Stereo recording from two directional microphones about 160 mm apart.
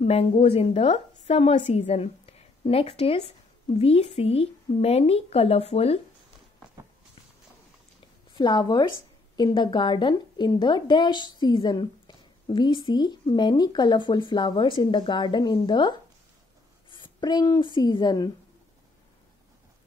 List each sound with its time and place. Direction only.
0.0 s a woman's voice: 40° left (ahead or behind)
8.4 s a woman's voice: 25° left (ahead or behind)